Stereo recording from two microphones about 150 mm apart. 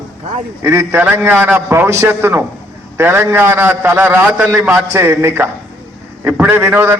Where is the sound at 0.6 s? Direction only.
20° right (ahead or behind).